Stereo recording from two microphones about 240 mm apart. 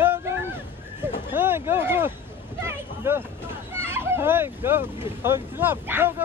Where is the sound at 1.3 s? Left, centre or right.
Centre.